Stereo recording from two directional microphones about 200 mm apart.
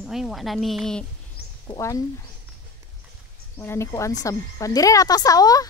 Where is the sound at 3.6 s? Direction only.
15° left (ahead or behind).